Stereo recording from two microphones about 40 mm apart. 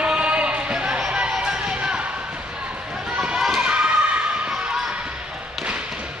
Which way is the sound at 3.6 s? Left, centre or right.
Right.